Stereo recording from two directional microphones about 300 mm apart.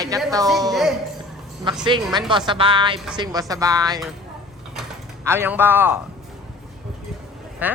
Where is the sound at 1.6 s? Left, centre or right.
Centre.